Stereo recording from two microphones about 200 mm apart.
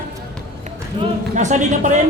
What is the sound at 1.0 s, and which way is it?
Speech, 25° right (ahead or behind).